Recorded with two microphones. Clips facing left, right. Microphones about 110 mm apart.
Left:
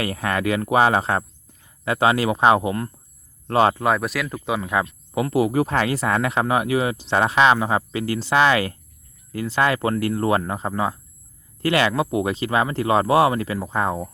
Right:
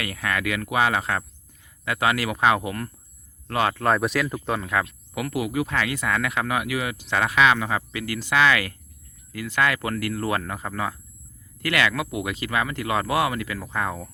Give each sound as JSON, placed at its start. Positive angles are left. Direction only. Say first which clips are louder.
{"t": 0.0, "sound": "speech", "louder": "left 4 dB", "side_deg": 30}
{"t": 3.8, "sound": "speech", "louder": "even", "side_deg": 5}
{"t": 4.5, "sound": "speech", "louder": "left 5 dB", "side_deg": 20}